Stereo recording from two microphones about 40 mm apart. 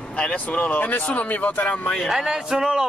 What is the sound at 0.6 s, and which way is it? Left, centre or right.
A man's voice, left.